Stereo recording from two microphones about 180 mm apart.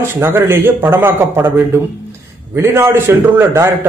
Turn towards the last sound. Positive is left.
turn(degrees=-15)  # may be behind; listen again after turning